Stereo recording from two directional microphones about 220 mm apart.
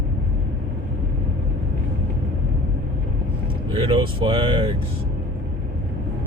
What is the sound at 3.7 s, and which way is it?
Speech, 25° right (ahead or behind).